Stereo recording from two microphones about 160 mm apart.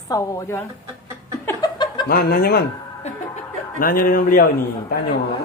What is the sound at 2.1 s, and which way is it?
Speech, 70° left (ahead or behind).